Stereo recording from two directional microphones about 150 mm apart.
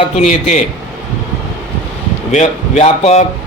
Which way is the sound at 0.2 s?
50° left (ahead or behind).